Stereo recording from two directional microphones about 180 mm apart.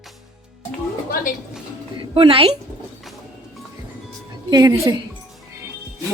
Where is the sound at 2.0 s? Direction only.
30° right (ahead or behind).